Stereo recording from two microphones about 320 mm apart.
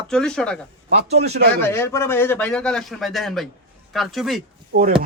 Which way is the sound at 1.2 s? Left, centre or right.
Right.